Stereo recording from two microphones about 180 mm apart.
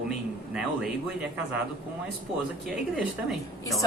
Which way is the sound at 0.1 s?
5° right (ahead or behind).